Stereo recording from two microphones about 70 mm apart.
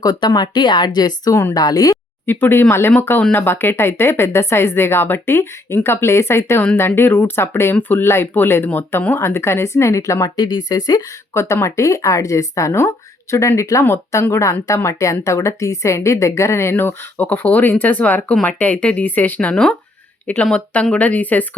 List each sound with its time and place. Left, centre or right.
0.0 s speech: left
1.3 s a woman's voice: left
1.5 s speech: left
2.2 s a woman's voice: left
10.3 s speech: left
11.3 s a woman's voice: left